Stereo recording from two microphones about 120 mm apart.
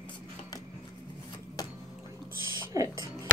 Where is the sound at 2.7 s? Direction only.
30° right (ahead or behind).